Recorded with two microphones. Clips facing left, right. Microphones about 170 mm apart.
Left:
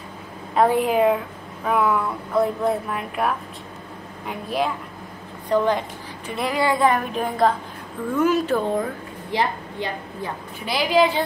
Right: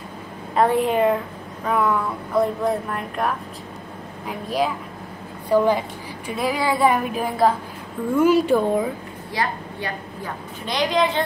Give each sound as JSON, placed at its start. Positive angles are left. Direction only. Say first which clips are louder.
{"t": 0.6, "sound": "a woman's voice", "louder": "even", "side_deg": 0}
{"t": 10.6, "sound": "a woman's voice", "louder": "left 2 dB", "side_deg": 5}